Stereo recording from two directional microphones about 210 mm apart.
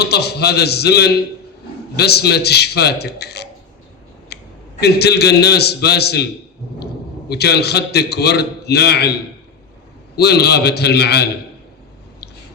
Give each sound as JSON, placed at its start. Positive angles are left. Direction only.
{"t": 0.0, "sound": "a man's voice", "side_deg": 50}
{"t": 4.3, "sound": "a sound", "side_deg": 50}
{"t": 4.8, "sound": "a man's voice", "side_deg": 50}
{"t": 7.3, "sound": "a man's voice", "side_deg": 50}
{"t": 10.2, "sound": "a man's voice", "side_deg": 50}